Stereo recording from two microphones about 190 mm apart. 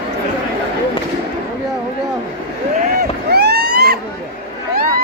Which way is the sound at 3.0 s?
60° right (ahead or behind).